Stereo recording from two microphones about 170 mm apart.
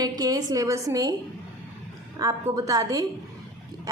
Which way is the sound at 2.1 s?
20° right (ahead or behind).